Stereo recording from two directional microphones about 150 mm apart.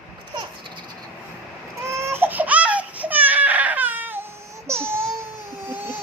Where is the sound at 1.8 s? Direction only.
20° right (ahead or behind).